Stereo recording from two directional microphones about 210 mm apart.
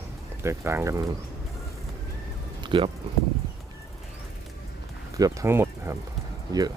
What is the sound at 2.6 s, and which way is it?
Speech, 25° right (ahead or behind).